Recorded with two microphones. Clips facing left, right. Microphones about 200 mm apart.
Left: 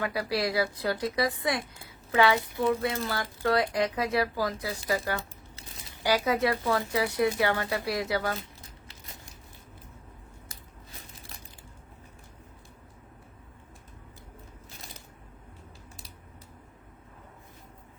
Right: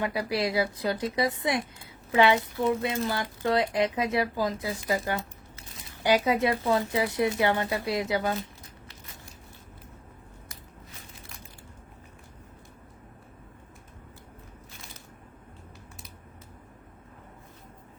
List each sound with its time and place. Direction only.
0.0 s speech: 20° right (ahead or behind)